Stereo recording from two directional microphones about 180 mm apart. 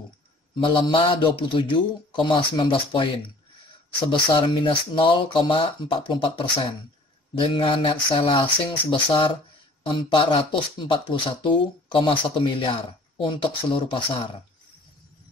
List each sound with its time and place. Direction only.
0.6 s speech: 25° left (ahead or behind)
4.1 s speech: 30° left (ahead or behind)